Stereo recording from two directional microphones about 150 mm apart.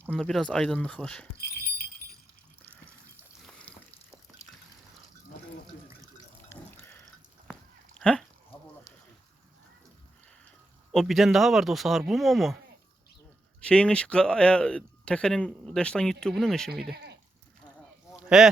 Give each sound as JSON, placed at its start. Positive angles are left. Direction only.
{"t": 0.1, "sound": "speech", "side_deg": 0}
{"t": 3.4, "sound": "a sound", "side_deg": 10}
{"t": 6.5, "sound": "drip", "side_deg": 15}
{"t": 7.9, "sound": "cat", "side_deg": 5}
{"t": 10.9, "sound": "speech", "side_deg": 0}
{"t": 13.6, "sound": "speech", "side_deg": 5}
{"t": 18.2, "sound": "a sound", "side_deg": -5}